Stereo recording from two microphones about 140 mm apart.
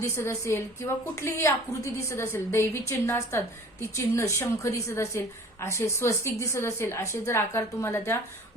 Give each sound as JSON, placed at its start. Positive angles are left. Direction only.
{"t": 0.0, "sound": "a woman's voice", "side_deg": 20}